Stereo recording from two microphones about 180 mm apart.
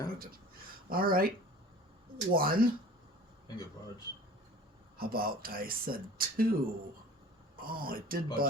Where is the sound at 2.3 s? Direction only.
55° right (ahead or behind).